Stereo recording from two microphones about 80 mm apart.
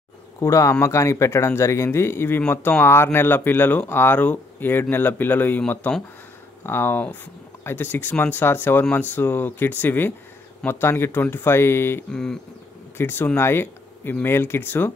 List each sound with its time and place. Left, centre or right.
0.4 s speech: left
12.1 s speech: centre
12.9 s speech: left